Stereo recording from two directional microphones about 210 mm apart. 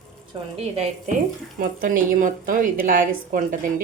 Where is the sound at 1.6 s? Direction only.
40° right (ahead or behind).